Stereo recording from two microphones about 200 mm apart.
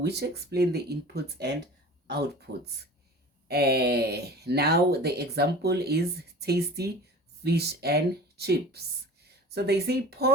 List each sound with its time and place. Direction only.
0.0 s speech: 55° right (ahead or behind)